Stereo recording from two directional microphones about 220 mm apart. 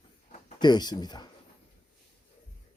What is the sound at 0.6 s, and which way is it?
Speech, 20° left (ahead or behind).